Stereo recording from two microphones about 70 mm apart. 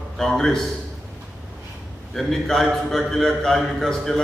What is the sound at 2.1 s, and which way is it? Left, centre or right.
A man's voice, centre.